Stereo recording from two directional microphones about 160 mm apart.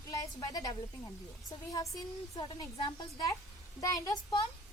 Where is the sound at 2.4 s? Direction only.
30° left (ahead or behind).